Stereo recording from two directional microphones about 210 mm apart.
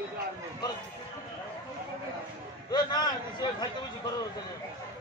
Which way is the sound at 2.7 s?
20° left (ahead or behind).